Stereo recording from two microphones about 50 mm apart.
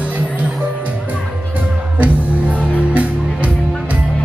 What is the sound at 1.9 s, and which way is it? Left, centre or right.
Music, right.